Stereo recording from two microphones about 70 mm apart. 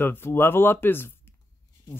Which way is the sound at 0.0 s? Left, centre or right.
Left.